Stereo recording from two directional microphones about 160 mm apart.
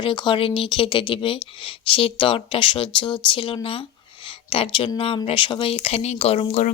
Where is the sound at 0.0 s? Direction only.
30° left (ahead or behind).